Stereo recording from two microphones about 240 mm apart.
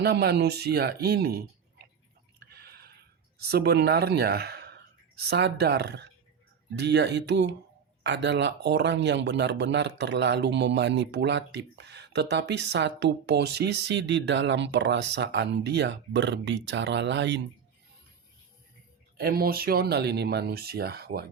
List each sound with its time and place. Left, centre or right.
0.0 s speech: right
2.4 s a sound: right
6.7 s a man's voice: right
19.1 s speech: right